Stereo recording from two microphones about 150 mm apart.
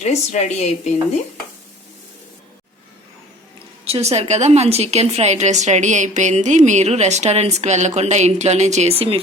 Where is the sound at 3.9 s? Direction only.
45° right (ahead or behind).